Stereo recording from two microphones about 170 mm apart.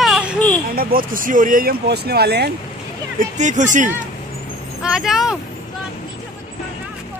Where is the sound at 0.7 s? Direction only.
60° right (ahead or behind); by 2.5 s 75° right (ahead or behind).